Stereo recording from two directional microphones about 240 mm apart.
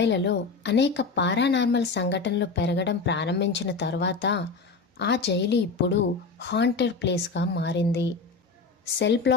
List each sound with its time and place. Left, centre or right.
0.0 s a woman's voice: left